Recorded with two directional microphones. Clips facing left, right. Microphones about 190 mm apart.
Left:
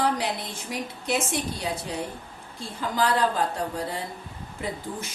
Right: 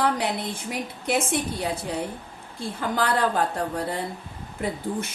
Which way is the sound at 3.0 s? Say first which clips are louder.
Even; 60° right (ahead or behind).